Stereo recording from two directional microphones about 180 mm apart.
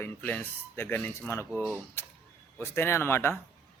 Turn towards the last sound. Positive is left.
turn(degrees=15)  # may be behind; listen again after turning